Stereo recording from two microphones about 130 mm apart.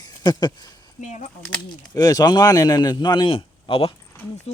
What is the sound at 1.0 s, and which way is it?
Speech, 70° left (ahead or behind).